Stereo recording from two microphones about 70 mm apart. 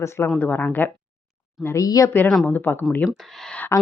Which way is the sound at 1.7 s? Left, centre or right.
Left.